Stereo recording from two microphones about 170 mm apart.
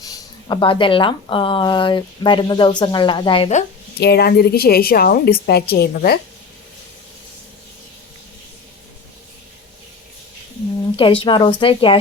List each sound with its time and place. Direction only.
0.4 s speech: 30° left (ahead or behind)
4.0 s a woman's voice: 70° left (ahead or behind)
10.9 s speech: 30° left (ahead or behind)